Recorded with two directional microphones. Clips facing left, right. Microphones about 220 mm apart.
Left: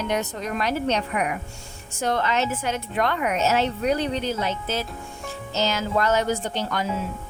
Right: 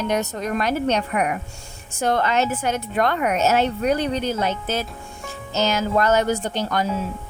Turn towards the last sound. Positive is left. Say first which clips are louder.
# right 3 dB
turn(degrees=-45)  # may be behind; listen again after turning